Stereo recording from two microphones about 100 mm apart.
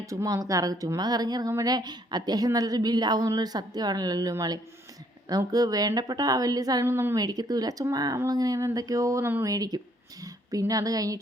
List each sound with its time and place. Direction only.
0.0 s a woman's voice: 30° right (ahead or behind)
6.8 s a woman's voice: 25° right (ahead or behind)
7.2 s a woman's voice: 40° right (ahead or behind)